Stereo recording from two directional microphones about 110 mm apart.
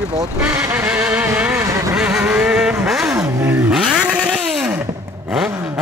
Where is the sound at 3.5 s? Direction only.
10° right (ahead or behind).